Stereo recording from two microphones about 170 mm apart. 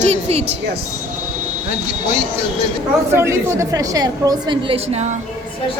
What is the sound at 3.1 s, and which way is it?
A woman's voice, 15° right (ahead or behind).